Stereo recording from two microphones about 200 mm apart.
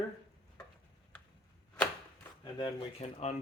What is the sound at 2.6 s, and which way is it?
Speech, 30° left (ahead or behind).